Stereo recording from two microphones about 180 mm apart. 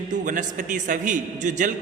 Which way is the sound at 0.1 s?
45° right (ahead or behind).